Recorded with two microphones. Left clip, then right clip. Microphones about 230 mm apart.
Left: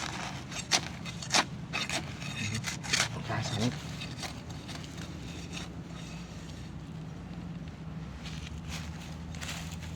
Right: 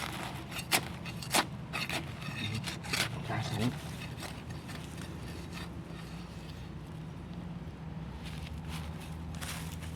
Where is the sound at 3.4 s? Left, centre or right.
Centre.